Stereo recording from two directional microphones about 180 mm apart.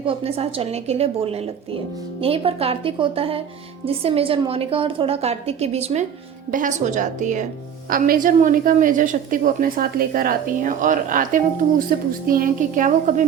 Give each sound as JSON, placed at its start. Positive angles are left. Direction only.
{"t": 0.0, "sound": "a woman's voice", "side_deg": -30}